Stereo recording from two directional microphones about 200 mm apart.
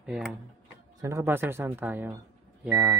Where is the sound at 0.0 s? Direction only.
5° right (ahead or behind).